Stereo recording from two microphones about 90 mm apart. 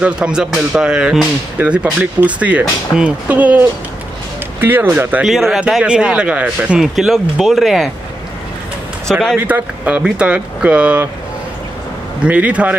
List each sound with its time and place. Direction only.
0.0 s speech: 10° right (ahead or behind)
5.2 s speech: centre (ahead or behind)
6.8 s speech: 5° right (ahead or behind)
9.1 s speech: centre (ahead or behind)
9.5 s speech: 15° right (ahead or behind)
12.2 s speech: 15° right (ahead or behind)